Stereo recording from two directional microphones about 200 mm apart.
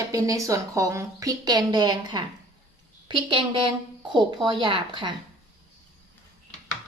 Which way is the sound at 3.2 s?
25° right (ahead or behind).